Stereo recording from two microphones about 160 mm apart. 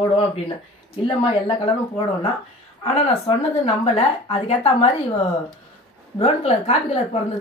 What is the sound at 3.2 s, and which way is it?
Speech, 40° left (ahead or behind).